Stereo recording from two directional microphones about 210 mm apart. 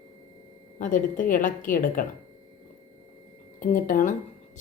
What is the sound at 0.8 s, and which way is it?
A woman's voice, 40° left (ahead or behind).